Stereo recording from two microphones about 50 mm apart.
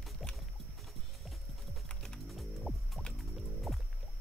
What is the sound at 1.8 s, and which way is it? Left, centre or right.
Music, centre.